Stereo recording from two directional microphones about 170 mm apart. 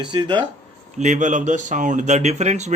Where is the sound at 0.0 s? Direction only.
25° right (ahead or behind).